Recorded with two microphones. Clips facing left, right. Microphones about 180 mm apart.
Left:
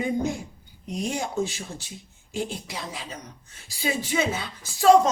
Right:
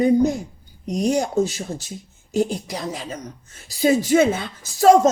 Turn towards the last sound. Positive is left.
turn(degrees=-45)  # may be behind; listen again after turning